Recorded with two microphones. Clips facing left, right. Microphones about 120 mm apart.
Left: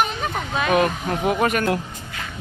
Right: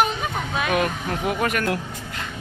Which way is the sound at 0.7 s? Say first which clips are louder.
Left 5 dB; 25° left (ahead or behind).